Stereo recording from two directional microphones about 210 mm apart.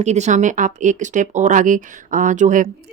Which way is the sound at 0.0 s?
35° right (ahead or behind).